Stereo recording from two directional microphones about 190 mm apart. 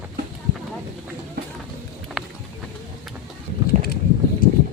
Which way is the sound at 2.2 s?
Centre (ahead or behind).